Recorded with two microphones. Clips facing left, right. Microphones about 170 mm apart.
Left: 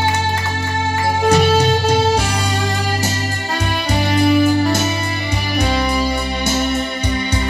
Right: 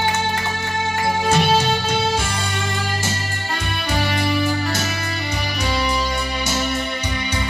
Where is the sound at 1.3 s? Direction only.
40° left (ahead or behind).